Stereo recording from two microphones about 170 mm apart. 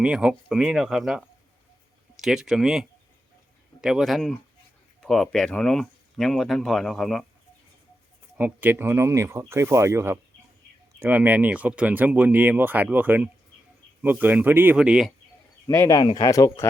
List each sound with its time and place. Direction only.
0.0 s speech: 5° right (ahead or behind)
8.4 s speech: 10° right (ahead or behind)
15.6 s speech: 20° left (ahead or behind)